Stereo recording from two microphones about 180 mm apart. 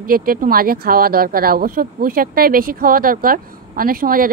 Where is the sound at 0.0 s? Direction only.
55° right (ahead or behind).